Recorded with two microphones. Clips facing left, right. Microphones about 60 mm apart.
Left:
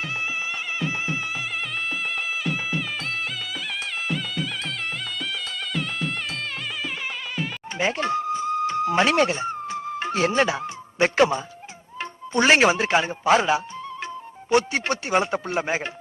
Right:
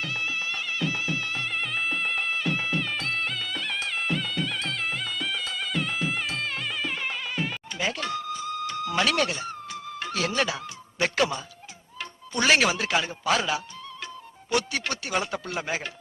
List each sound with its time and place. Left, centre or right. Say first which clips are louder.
2.5 s music: even; centre
4.1 s music: even; centre
5.7 s music: even; centre
7.8 s a sound: left 6 dB; left
11.9 s speech: left 6 dB; left